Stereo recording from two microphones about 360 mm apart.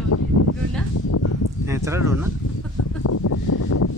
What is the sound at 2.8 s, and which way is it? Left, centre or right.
Speech, left.